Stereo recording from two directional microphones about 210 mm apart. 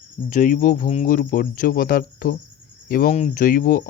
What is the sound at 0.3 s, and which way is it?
Speech, 40° left (ahead or behind).